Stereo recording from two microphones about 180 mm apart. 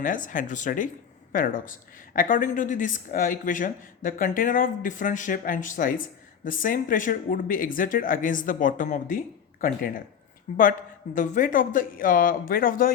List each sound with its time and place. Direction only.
0.0 s speech: 45° left (ahead or behind)